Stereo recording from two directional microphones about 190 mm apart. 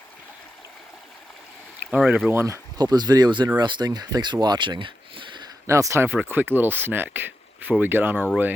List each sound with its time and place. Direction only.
1.9 s speech: 5° right (ahead or behind)